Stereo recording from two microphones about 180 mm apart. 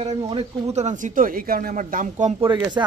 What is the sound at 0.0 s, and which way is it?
Speech, 35° right (ahead or behind).